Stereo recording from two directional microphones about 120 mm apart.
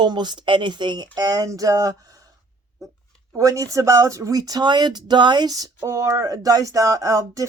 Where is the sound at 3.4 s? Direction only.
25° right (ahead or behind).